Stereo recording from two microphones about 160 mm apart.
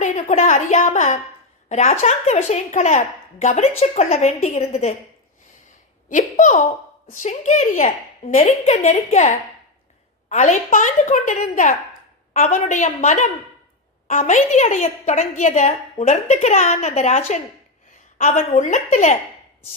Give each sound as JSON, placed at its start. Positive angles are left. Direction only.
{"t": 0.0, "sound": "a sound", "side_deg": 45}
{"t": 1.7, "sound": "a woman's voice", "side_deg": 45}
{"t": 6.1, "sound": "a woman's voice", "side_deg": 55}